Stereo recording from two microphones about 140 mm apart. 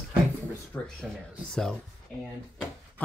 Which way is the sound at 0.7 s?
15° left (ahead or behind).